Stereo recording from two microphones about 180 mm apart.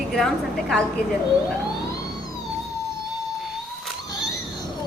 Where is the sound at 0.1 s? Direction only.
Centre (ahead or behind).